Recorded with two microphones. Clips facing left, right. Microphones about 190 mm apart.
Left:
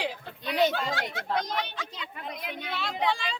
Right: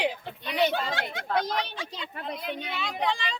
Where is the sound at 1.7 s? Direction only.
30° right (ahead or behind).